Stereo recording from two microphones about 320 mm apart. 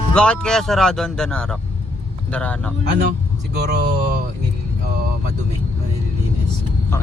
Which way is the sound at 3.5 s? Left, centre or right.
Right.